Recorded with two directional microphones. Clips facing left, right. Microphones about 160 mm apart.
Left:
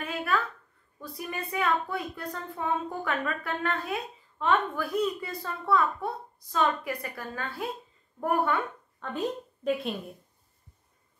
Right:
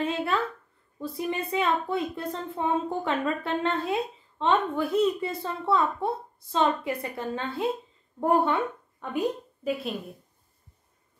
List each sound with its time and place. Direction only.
0.0 s a sound: 25° right (ahead or behind)
0.9 s a woman's voice: 25° right (ahead or behind)
9.0 s a woman's voice: 10° right (ahead or behind)